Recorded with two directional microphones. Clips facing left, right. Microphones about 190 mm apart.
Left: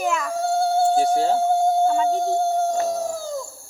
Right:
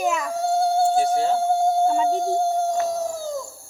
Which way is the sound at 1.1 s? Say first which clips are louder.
Left 1 dB; 35° left (ahead or behind).